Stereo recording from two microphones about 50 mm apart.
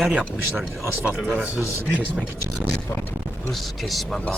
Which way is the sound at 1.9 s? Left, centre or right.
Right.